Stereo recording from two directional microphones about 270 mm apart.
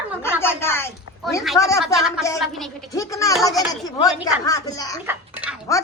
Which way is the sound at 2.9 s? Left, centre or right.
Centre.